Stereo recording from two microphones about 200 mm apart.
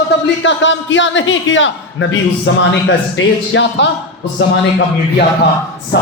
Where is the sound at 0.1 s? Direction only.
65° left (ahead or behind).